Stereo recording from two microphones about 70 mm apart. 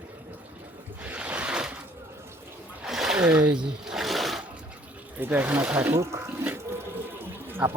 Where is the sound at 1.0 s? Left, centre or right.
Right.